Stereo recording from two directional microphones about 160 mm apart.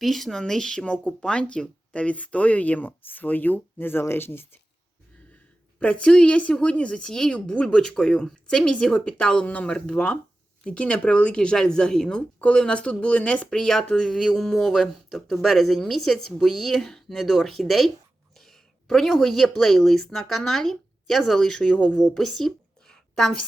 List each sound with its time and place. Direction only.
0.0 s speech: centre (ahead or behind)
5.8 s speech: 5° left (ahead or behind)